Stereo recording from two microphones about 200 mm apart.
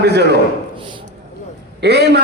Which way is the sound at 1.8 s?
55° right (ahead or behind).